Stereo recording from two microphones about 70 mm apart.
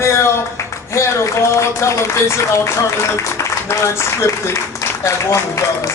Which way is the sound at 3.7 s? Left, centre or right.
Left.